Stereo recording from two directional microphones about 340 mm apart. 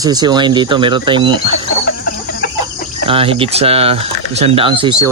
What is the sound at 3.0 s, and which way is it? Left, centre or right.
Speech, centre.